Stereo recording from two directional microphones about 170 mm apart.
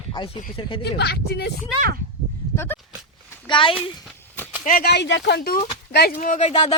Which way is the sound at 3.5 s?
30° left (ahead or behind).